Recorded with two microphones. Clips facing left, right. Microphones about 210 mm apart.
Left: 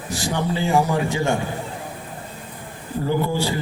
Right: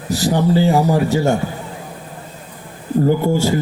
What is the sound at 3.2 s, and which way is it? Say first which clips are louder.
Speech: right 7 dB; 45° right (ahead or behind).